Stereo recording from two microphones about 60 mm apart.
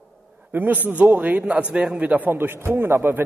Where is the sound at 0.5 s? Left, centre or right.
Right.